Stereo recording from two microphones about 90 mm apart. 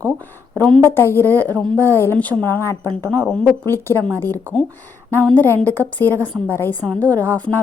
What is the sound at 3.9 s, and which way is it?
Speech, 30° right (ahead or behind).